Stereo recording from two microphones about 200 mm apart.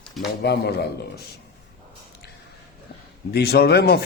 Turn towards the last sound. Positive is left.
turn(degrees=55)  # may be behind; listen again after turning